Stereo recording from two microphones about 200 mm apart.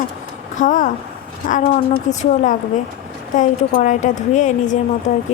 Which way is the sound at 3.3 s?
40° left (ahead or behind).